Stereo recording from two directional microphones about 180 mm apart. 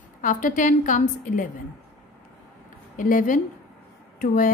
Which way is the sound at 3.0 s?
50° left (ahead or behind).